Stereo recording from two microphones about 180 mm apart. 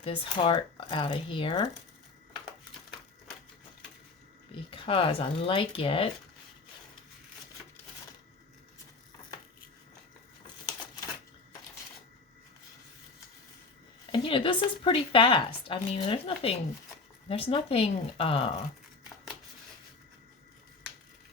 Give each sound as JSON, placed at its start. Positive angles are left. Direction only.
{"t": 0.0, "sound": "speech", "side_deg": 30}
{"t": 4.5, "sound": "speech", "side_deg": 30}
{"t": 10.4, "sound": "crumpling", "side_deg": 20}
{"t": 14.1, "sound": "speech", "side_deg": 30}